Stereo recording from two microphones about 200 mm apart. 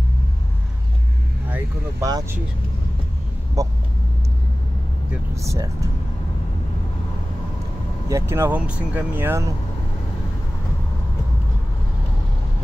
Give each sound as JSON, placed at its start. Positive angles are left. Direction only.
{"t": 1.5, "sound": "speech", "side_deg": -15}
{"t": 3.6, "sound": "speech", "side_deg": -15}
{"t": 5.1, "sound": "speech", "side_deg": -15}
{"t": 8.1, "sound": "speech", "side_deg": -10}